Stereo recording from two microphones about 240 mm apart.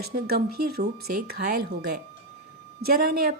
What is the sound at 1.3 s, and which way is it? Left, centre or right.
A woman's voice, right.